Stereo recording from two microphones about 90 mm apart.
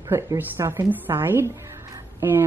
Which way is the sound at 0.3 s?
30° right (ahead or behind).